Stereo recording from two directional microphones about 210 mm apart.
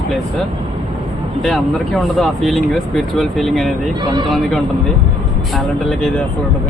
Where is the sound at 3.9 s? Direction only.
20° right (ahead or behind).